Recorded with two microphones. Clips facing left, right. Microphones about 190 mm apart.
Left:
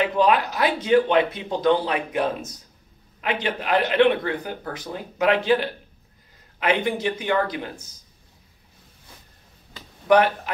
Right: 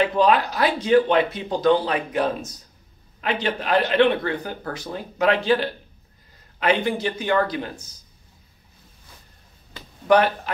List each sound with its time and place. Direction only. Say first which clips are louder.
0.0 s a man's voice: right 1 dB; 20° left (ahead or behind)
3.2 s a man's voice: right 1 dB; 20° left (ahead or behind)
10.0 s a man's voice: even; 20° left (ahead or behind)